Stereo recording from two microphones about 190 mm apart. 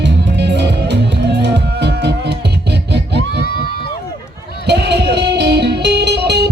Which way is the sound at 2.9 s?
60° right (ahead or behind).